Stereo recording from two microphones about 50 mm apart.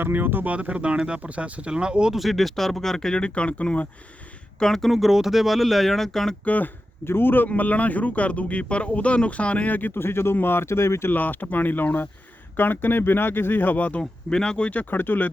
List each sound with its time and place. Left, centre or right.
0.0 s speech: right
0.5 s speech: right
2.1 s speech: centre; by 3.8 s left
4.6 s speech: centre
6.4 s speech: left
7.0 s speech: left
9.9 s speech: left
11.1 s speech: left
14.0 s speech: centre
14.7 s speech: left